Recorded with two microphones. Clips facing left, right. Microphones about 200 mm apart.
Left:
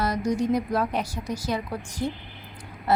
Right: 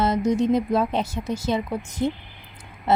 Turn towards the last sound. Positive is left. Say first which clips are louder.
# right 2 dB
turn(degrees=-25)  # may be behind; listen again after turning